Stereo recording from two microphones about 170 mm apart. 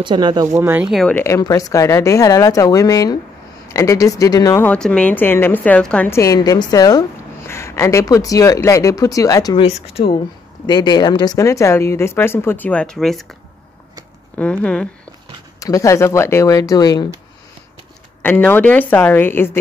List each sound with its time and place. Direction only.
0.0 s speech: 25° right (ahead or behind)
0.8 s speech: centre (ahead or behind)
1.1 s speech: 15° left (ahead or behind)
4.6 s a woman's voice: 5° left (ahead or behind); by 9.7 s 20° left (ahead or behind)
9.7 s a woman's voice: 35° left (ahead or behind); by 13.3 s centre (ahead or behind)
14.3 s a woman's voice: 10° left (ahead or behind)
15.6 s speech: 20° left (ahead or behind)
18.2 s a woman's voice: 10° left (ahead or behind)